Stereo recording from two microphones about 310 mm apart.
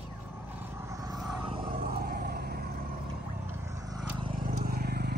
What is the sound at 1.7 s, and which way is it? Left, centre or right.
Vehicle, right.